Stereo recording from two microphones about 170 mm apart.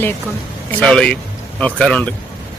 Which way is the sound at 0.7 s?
5° left (ahead or behind).